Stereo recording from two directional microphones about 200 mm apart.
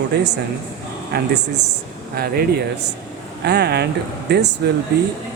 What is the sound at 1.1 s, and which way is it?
Mantra, 55° right (ahead or behind).